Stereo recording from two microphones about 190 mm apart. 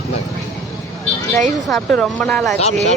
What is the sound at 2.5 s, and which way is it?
Speech, 35° left (ahead or behind).